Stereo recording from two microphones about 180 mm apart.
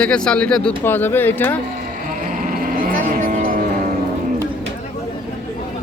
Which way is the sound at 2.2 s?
50° right (ahead or behind).